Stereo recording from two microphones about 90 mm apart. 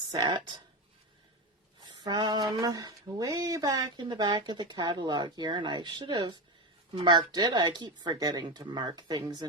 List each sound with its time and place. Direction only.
0.1 s speech: 50° right (ahead or behind)
1.8 s speech: 55° right (ahead or behind)
4.0 s speech: 55° right (ahead or behind)